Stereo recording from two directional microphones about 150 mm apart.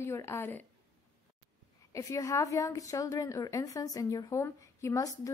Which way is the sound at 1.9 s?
20° left (ahead or behind).